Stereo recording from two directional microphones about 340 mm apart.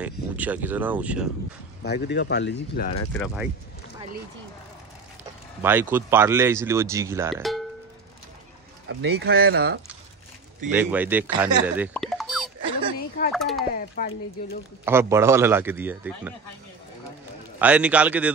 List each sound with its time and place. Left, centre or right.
0.0 s speech: centre
1.8 s speech: left
3.1 s speech: centre
5.6 s speech: centre
9.2 s speech: right
10.7 s speech: centre
11.9 s music: centre
13.3 s a sound: centre
13.7 s speech: left
14.9 s speech: centre
17.6 s speech: centre